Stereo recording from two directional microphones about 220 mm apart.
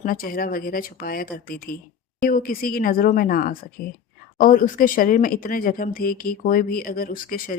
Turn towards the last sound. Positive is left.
turn(degrees=40)  # may be behind; listen again after turning